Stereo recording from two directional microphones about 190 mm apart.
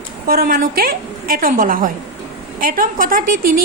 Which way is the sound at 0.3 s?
50° right (ahead or behind).